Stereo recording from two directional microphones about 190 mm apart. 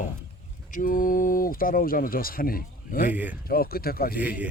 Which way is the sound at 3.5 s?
50° left (ahead or behind).